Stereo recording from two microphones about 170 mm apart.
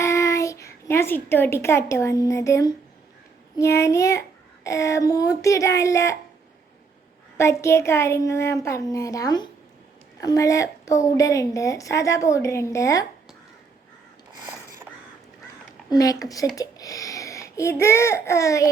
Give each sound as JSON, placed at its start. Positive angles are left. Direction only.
{"t": 0.0, "sound": "a child's voice", "side_deg": 15}
{"t": 7.3, "sound": "a child's voice", "side_deg": 15}
{"t": 15.9, "sound": "a woman's voice", "side_deg": 20}